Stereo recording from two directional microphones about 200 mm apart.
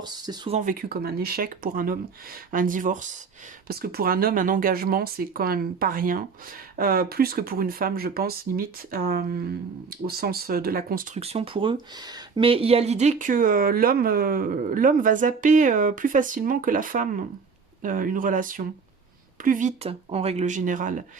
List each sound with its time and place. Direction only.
0.0 s speech: 20° right (ahead or behind)
0.5 s speech: 40° right (ahead or behind)